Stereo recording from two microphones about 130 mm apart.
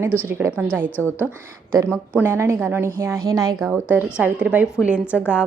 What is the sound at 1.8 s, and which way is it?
A woman's voice, 15° right (ahead or behind).